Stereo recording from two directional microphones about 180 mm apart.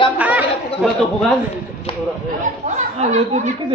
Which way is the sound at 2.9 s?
40° right (ahead or behind).